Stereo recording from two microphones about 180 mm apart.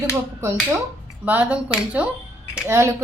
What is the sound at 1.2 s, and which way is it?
Speech, 10° right (ahead or behind).